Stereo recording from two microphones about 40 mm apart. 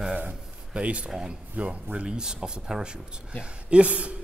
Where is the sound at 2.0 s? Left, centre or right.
Centre.